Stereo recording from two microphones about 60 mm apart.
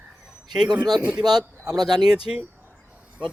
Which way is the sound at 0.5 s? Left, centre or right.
Centre.